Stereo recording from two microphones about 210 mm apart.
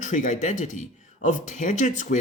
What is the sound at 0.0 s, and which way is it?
Speech, 35° left (ahead or behind).